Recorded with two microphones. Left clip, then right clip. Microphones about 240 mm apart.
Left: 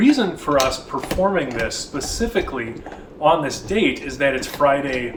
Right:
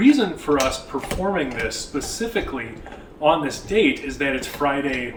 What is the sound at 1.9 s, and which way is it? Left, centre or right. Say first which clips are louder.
A man's voice: left 4 dB; centre.